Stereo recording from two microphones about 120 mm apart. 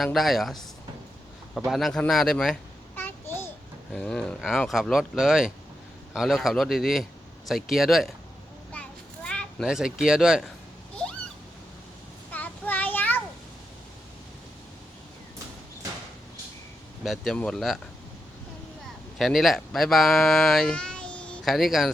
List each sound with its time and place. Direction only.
0.0 s speech: centre (ahead or behind)
2.9 s a sound: 15° left (ahead or behind)
3.9 s speech: 5° left (ahead or behind)
8.7 s children playing: 10° left (ahead or behind)
9.6 s speech: 5° right (ahead or behind)
12.3 s child singing: 15° left (ahead or behind)
17.0 s speech: centre (ahead or behind)
19.2 s speech: centre (ahead or behind)